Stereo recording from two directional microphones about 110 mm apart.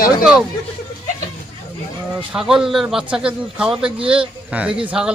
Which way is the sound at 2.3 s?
5° right (ahead or behind).